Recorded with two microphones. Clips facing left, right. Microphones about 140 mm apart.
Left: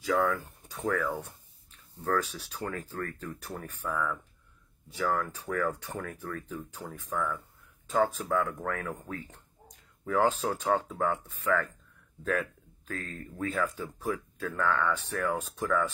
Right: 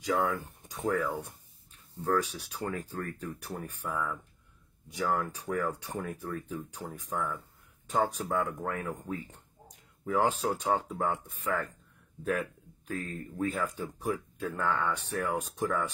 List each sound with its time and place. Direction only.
0.0 s speech: 15° right (ahead or behind)
10.0 s speech: 10° right (ahead or behind)